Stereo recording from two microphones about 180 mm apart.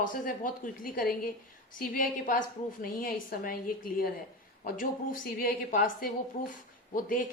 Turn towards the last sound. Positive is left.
turn(degrees=50)  # may be behind; listen again after turning